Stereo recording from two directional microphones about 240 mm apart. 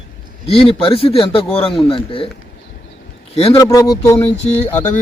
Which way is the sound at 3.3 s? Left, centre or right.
Left.